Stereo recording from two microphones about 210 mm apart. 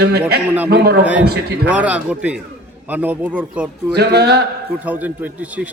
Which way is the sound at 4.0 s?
50° right (ahead or behind).